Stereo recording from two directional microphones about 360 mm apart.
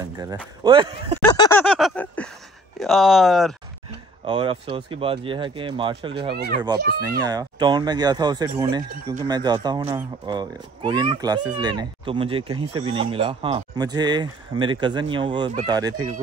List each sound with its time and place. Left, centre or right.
0.0 s speech: centre
1.2 s a sound: centre
2.8 s speech: centre
4.3 s speech: centre
6.3 s a child's voice: right
7.1 s speech: centre